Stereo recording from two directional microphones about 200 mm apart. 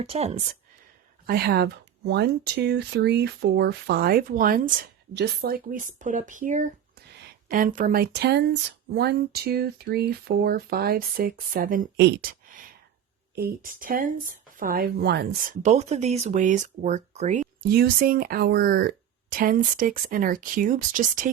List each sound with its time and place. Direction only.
0.0 s speech: 30° right (ahead or behind)
1.3 s speech: 50° right (ahead or behind)
11.9 s speech: 55° right (ahead or behind); by 17.4 s 35° right (ahead or behind)
17.6 s speech: 50° right (ahead or behind)